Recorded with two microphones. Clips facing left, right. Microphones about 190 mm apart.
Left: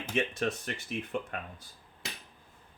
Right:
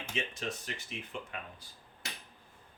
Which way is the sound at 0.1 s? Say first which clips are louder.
Left 8 dB; 55° left (ahead or behind).